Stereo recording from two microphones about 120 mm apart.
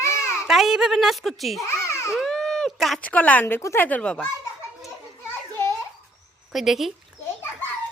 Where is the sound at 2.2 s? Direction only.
5° left (ahead or behind).